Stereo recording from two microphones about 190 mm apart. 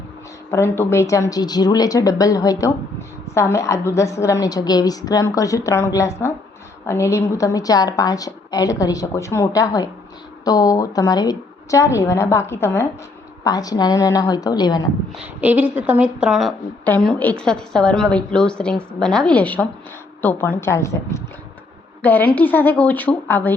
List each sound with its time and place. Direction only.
0.5 s a woman's voice: 15° left (ahead or behind)
15.1 s a woman's voice: 10° right (ahead or behind); by 23.6 s 10° left (ahead or behind)